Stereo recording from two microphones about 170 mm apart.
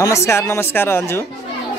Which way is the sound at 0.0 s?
15° left (ahead or behind).